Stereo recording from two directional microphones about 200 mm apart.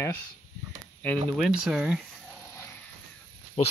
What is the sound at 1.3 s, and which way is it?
Speech, centre (ahead or behind).